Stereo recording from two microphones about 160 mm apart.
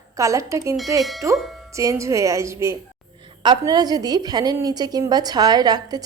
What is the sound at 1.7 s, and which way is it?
A woman's voice, 20° right (ahead or behind).